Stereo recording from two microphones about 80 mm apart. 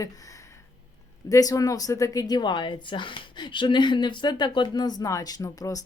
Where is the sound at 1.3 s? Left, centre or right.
Left.